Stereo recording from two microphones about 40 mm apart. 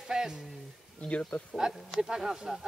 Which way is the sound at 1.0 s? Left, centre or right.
Left.